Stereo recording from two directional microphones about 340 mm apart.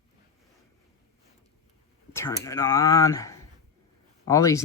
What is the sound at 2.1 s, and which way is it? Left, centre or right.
Speech, centre.